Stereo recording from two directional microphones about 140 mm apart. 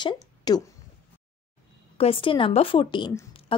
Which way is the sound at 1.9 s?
40° left (ahead or behind).